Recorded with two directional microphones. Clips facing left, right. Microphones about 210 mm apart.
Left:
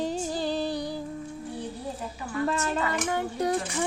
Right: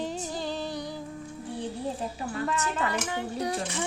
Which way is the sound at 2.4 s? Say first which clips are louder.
Left 4 dB; 35° left (ahead or behind).